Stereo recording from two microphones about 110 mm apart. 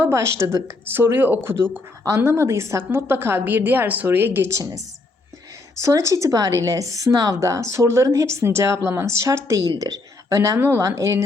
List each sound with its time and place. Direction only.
0.0 s speech: 25° right (ahead or behind)
4.5 s a woman's voice: 30° right (ahead or behind)